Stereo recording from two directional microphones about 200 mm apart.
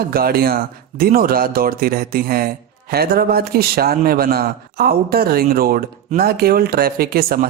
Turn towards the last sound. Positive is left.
turn(degrees=-50)  # may be behind; listen again after turning